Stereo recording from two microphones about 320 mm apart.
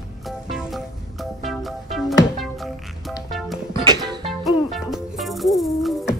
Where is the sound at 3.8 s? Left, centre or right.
Centre.